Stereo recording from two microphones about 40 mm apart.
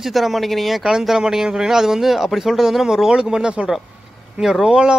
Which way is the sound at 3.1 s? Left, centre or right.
Centre.